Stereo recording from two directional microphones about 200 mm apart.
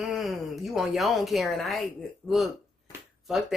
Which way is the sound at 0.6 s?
Centre (ahead or behind).